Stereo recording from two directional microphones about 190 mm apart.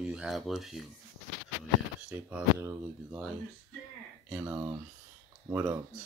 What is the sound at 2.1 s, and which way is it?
Speech, 10° right (ahead or behind).